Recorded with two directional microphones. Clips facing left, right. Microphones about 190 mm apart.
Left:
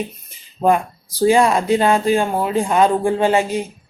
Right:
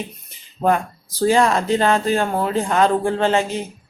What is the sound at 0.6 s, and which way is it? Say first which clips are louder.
Speech: left 2 dB; 15° left (ahead or behind).